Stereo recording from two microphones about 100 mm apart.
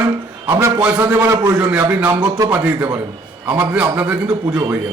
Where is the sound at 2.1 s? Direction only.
40° right (ahead or behind).